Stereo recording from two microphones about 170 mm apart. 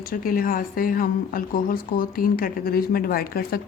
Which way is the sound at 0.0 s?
55° left (ahead or behind).